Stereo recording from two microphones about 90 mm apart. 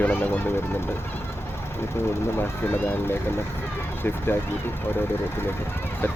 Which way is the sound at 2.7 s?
25° left (ahead or behind).